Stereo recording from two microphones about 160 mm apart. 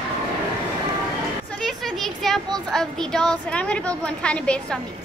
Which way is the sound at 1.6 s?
Centre (ahead or behind).